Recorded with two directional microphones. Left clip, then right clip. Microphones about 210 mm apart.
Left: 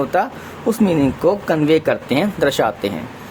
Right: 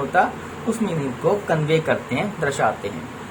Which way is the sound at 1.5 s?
55° left (ahead or behind).